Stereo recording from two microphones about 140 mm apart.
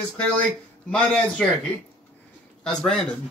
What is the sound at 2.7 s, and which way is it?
Speech, 5° left (ahead or behind).